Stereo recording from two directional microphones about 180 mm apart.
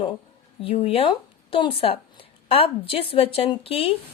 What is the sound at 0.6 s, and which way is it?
A woman's voice, 30° left (ahead or behind).